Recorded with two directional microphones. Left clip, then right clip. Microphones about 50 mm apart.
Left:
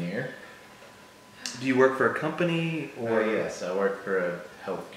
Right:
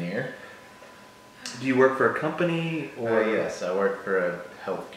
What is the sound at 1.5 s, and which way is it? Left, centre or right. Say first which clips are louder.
A man's voice: right 1 dB; centre.